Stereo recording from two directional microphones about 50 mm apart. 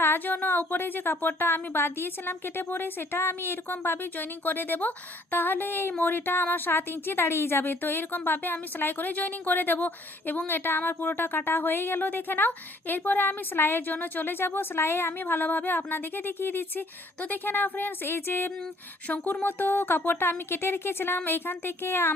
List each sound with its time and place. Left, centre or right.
0.0 s a woman's voice: left
19.0 s a woman's voice: left